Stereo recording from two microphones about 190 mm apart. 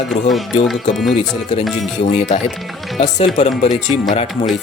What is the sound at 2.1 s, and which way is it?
Speech, 35° left (ahead or behind).